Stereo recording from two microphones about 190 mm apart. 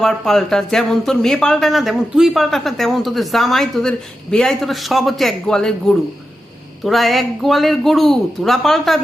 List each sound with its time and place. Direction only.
0.0 s speech: centre (ahead or behind)